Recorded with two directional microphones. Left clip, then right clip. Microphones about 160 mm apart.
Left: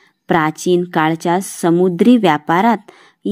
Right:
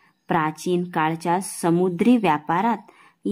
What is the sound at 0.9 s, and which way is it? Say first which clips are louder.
Speech: left 7 dB; 30° left (ahead or behind).